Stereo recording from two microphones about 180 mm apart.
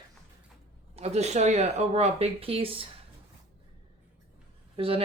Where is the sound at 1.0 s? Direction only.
35° right (ahead or behind).